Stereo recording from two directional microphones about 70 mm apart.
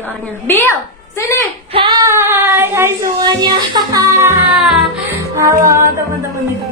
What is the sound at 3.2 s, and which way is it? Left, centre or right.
Music, right.